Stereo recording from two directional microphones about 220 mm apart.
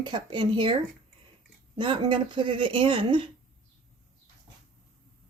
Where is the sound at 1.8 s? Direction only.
20° right (ahead or behind).